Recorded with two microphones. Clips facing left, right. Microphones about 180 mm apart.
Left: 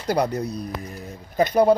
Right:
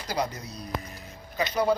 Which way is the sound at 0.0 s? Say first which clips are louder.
Left 8 dB; 60° left (ahead or behind).